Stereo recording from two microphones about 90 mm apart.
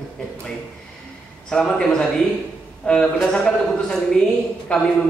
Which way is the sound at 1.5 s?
5° left (ahead or behind).